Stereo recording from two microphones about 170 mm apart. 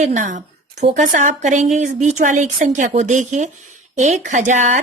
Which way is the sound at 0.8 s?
45° right (ahead or behind).